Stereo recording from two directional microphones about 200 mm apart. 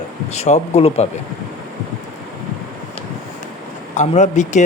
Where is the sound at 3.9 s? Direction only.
35° left (ahead or behind).